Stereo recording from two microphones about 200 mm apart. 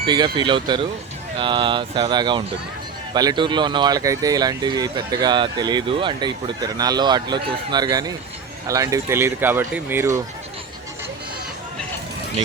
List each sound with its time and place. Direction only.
0.0 s speech: 20° right (ahead or behind)